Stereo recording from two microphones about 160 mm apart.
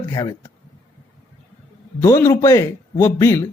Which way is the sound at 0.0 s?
20° left (ahead or behind).